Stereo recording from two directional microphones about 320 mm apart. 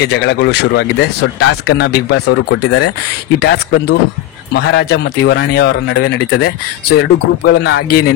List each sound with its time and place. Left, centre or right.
0.0 s speech: left